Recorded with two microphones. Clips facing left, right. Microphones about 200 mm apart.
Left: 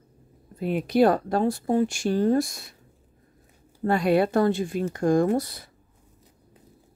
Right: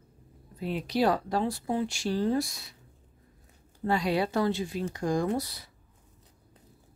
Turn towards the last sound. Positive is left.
turn(degrees=50)  # may be behind; listen again after turning